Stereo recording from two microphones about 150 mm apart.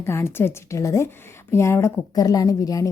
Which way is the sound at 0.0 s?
15° left (ahead or behind).